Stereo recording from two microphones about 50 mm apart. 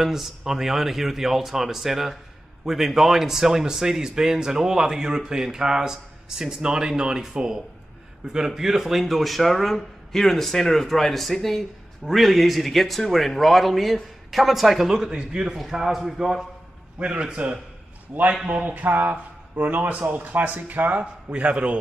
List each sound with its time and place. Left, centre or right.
0.0 s speech: centre
17.0 s a man's voice: right
18.7 s speech: right